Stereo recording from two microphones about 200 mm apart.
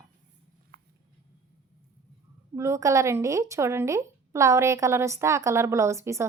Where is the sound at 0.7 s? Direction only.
55° right (ahead or behind).